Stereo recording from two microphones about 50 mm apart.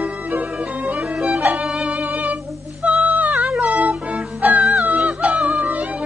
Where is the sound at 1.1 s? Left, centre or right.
Right.